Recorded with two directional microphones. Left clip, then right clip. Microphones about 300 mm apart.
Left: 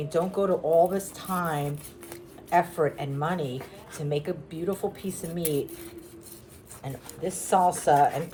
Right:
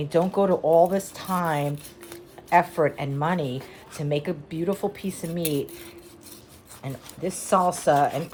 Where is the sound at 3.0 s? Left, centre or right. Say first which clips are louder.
Right 3 dB; right.